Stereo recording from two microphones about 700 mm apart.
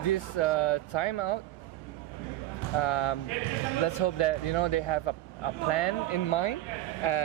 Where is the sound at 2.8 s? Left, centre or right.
Left.